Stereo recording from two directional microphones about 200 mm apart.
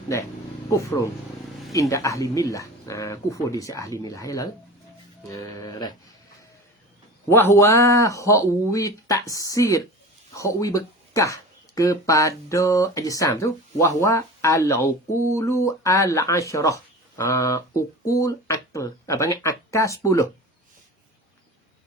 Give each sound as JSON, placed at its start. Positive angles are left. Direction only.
{"t": 0.7, "sound": "speech", "side_deg": 15}
{"t": 7.3, "sound": "speech", "side_deg": 10}